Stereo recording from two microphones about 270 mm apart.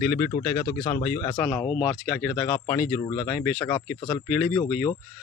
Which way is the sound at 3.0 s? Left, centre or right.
Centre.